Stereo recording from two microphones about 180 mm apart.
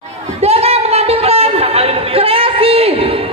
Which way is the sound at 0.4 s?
35° right (ahead or behind).